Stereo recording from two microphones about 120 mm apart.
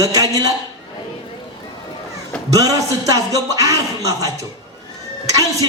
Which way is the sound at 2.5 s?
30° right (ahead or behind).